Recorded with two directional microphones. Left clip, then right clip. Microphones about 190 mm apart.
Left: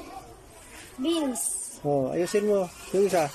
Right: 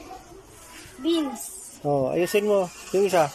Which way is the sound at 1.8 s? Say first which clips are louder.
Right 3 dB; centre (ahead or behind).